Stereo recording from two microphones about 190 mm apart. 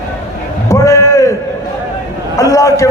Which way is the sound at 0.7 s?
15° left (ahead or behind).